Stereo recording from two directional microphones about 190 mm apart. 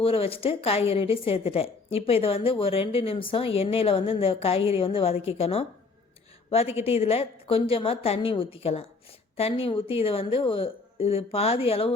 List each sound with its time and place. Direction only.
0.0 s speech: 30° left (ahead or behind)
6.7 s a woman's voice: 30° left (ahead or behind)